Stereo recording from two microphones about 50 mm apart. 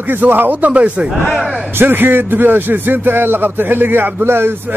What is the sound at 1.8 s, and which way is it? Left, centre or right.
Speech, right.